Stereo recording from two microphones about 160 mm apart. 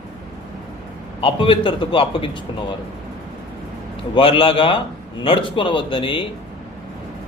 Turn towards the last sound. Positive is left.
turn(degrees=35)  # may be behind; listen again after turning